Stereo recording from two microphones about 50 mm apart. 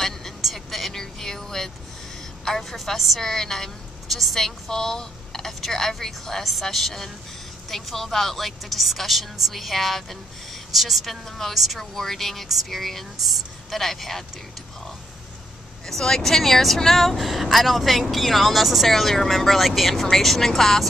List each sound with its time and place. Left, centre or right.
0.4 s vehicle: centre
2.4 s a woman's voice: centre
15.9 s a woman's voice: centre